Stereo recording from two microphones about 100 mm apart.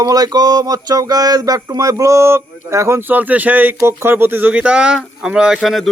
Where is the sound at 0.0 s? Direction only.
40° right (ahead or behind); by 3.8 s 15° right (ahead or behind).